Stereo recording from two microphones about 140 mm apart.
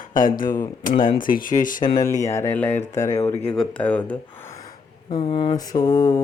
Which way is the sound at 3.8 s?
10° left (ahead or behind).